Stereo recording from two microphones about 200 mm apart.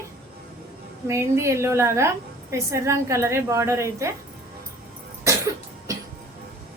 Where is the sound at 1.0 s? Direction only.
15° right (ahead or behind).